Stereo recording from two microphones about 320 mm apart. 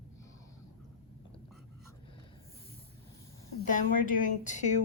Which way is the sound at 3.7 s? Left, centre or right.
Left.